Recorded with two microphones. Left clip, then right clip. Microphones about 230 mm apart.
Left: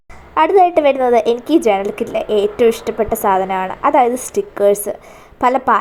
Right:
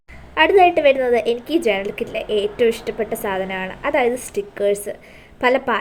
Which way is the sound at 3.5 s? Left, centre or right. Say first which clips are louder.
Left 8 dB; left.